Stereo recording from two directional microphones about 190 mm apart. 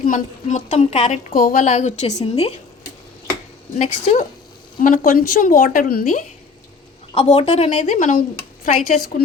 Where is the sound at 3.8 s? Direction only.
35° left (ahead or behind).